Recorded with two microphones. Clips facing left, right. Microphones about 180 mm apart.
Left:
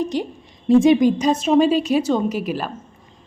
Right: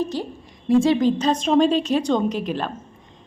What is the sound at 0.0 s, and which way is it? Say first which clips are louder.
A woman's voice: left 2 dB; 15° left (ahead or behind).